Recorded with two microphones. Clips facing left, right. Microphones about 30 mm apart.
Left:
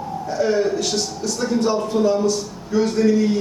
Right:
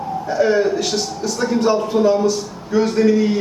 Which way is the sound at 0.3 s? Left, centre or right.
Centre.